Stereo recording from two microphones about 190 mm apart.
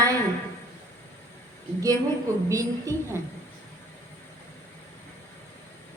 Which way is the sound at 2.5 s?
15° right (ahead or behind).